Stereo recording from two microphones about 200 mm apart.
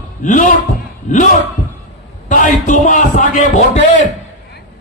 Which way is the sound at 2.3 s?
40° left (ahead or behind).